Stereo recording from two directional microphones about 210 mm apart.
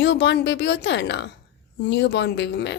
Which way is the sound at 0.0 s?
55° left (ahead or behind).